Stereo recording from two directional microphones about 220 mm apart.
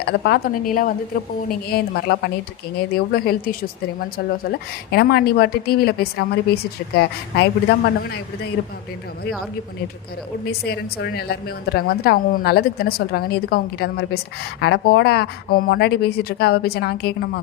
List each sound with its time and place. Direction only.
0.0 s a woman's voice: 45° left (ahead or behind)
4.9 s a woman's voice: 45° left (ahead or behind)
10.4 s a woman's voice: 45° left (ahead or behind)